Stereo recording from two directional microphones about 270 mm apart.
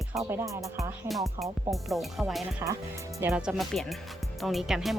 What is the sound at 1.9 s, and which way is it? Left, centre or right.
Speech, centre.